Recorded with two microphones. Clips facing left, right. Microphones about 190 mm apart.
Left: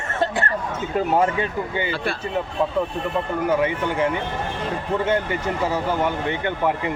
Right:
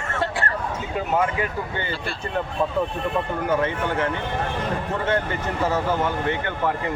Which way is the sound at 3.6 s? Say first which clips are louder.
Left 2 dB; 15° left (ahead or behind).